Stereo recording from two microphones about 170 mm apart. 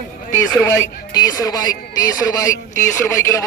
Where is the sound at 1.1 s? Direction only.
20° left (ahead or behind).